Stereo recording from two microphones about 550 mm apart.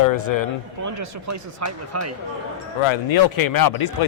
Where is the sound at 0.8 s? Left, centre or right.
Right.